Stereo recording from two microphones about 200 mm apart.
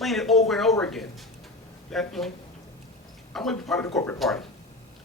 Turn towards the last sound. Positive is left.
turn(degrees=0)  # may be behind; listen again after turning